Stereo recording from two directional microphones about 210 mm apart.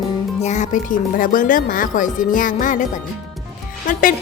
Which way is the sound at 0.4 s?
35° left (ahead or behind).